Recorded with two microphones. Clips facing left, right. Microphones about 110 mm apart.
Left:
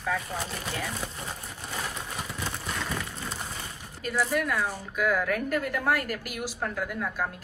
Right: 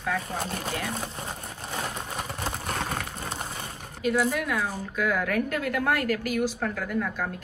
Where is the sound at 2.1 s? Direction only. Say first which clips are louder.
Right 3 dB; 50° right (ahead or behind).